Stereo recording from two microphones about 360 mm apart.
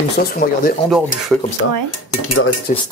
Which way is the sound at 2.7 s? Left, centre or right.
Left.